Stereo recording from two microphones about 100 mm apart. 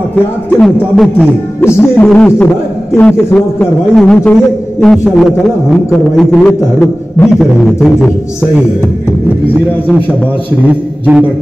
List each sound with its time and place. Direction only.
0.1 s a man's voice: 5° left (ahead or behind)
1.6 s music: 20° left (ahead or behind)
2.1 s a man's voice: 15° left (ahead or behind)
4.9 s a man's voice: 5° right (ahead or behind)
5.9 s a man's voice: 10° left (ahead or behind)
7.2 s a man's voice: 5° right (ahead or behind)
10.7 s a man's voice: 15° right (ahead or behind)